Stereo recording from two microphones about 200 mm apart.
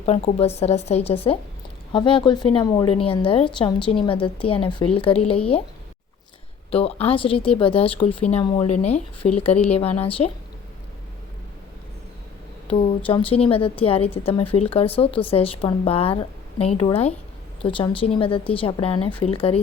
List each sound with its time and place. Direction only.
0.0 s a woman's voice: 30° left (ahead or behind)
6.7 s a woman's voice: 30° left (ahead or behind)
12.6 s a woman's voice: 30° left (ahead or behind)